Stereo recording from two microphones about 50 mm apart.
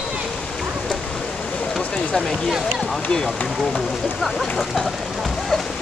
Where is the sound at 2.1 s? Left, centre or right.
Centre.